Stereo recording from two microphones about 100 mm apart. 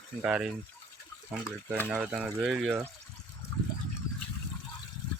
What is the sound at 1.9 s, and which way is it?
Speech, 15° right (ahead or behind).